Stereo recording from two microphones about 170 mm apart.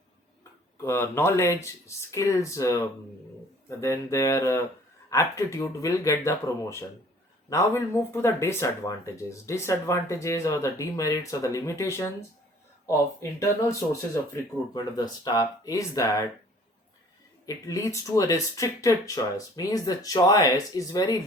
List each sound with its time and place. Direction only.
0.8 s speech: 15° left (ahead or behind)
17.4 s speech: 20° left (ahead or behind)